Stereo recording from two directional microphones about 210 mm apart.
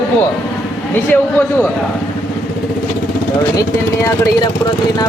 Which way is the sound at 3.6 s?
15° left (ahead or behind).